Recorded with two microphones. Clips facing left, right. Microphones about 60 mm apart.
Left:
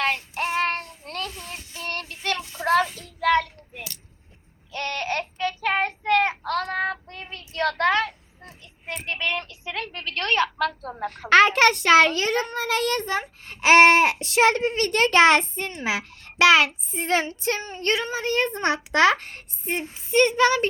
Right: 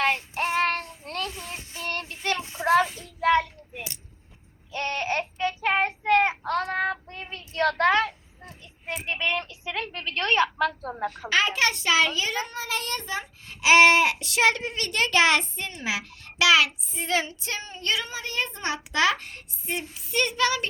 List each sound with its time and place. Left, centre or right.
0.0 s child singing: right
1.0 s a sound: right
1.3 s child singing: centre
2.8 s child singing: centre
3.2 s child singing: centre
8.4 s a sound: centre
11.1 s a sound: left
12.5 s child singing: left
12.9 s a child's voice: left